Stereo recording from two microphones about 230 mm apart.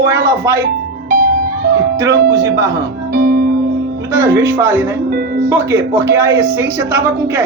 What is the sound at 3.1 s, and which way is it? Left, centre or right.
Music, right.